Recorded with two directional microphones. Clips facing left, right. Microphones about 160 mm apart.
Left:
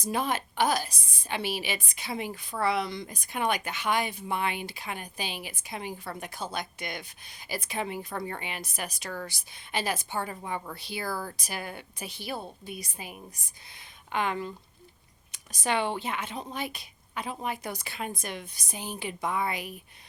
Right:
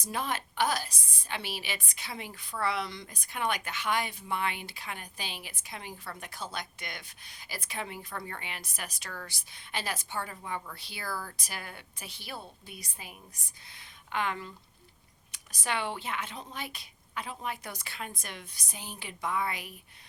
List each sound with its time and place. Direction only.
0.0 s a woman's voice: 15° left (ahead or behind)